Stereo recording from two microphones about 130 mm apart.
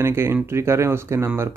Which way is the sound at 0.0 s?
20° right (ahead or behind).